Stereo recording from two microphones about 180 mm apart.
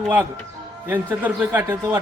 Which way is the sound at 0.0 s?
10° right (ahead or behind).